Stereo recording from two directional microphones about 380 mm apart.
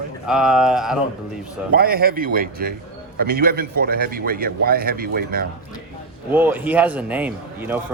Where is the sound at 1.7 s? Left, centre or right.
Right.